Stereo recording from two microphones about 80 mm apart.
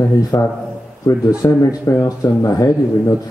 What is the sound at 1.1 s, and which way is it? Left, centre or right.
Speech, left.